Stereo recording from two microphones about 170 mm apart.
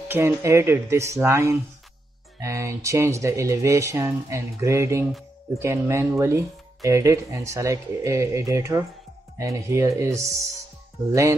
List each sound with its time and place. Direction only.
0.1 s speech: 15° right (ahead or behind)